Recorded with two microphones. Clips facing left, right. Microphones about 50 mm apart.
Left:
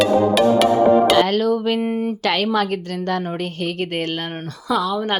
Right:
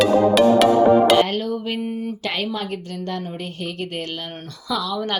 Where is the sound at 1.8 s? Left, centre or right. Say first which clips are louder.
Left 5 dB; left.